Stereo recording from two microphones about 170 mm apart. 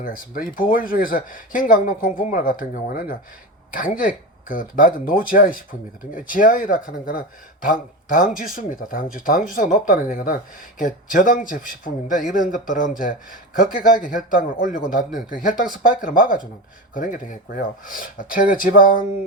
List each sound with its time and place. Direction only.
0.0 s speech: 55° left (ahead or behind)